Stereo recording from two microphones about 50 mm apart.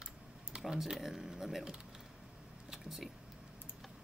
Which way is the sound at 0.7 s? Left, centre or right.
Centre.